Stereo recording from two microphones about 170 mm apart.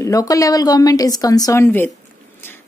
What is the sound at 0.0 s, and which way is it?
A woman's voice, 20° left (ahead or behind).